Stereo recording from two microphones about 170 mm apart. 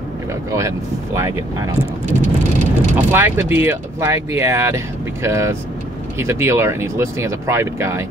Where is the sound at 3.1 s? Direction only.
15° right (ahead or behind).